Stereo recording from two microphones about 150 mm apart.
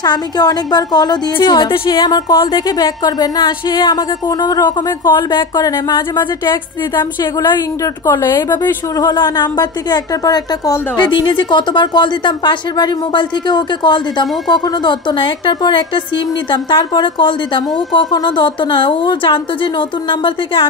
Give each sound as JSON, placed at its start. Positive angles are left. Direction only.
{"t": 0.0, "sound": "a woman's voice", "side_deg": 25}